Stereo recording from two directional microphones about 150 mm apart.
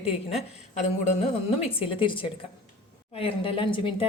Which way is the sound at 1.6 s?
35° left (ahead or behind).